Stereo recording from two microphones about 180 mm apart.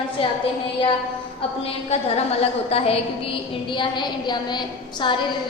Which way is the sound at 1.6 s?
35° left (ahead or behind).